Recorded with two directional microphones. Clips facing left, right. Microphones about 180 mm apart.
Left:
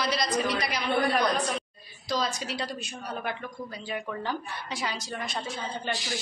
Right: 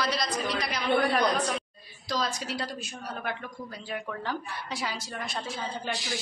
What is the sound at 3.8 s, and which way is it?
A woman's voice, centre (ahead or behind).